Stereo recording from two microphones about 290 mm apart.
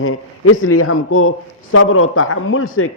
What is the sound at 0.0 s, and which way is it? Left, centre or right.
A man's voice, left.